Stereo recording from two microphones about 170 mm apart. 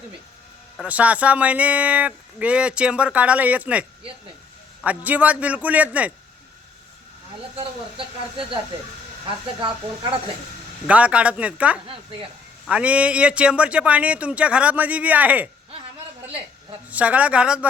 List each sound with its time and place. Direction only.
0.8 s speech: 10° right (ahead or behind)
9.2 s speech: 30° right (ahead or behind)
10.8 s speech: 5° right (ahead or behind)
16.9 s speech: 10° right (ahead or behind)